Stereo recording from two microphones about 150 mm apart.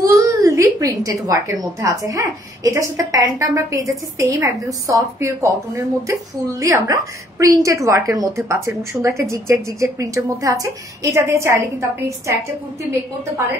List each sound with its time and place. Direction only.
0.0 s a woman's voice: 20° right (ahead or behind)